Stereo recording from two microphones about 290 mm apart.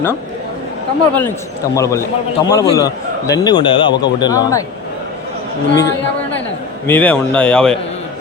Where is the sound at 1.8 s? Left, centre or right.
Centre.